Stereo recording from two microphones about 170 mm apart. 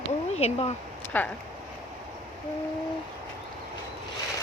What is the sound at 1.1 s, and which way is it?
Speech, 10° left (ahead or behind).